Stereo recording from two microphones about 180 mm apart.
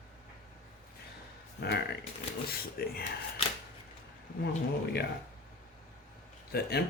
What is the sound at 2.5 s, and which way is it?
Speech, 55° left (ahead or behind).